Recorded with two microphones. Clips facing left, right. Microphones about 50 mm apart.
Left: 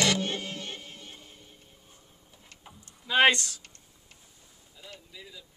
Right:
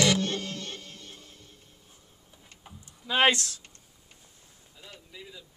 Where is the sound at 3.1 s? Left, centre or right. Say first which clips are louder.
Left 1 dB; centre.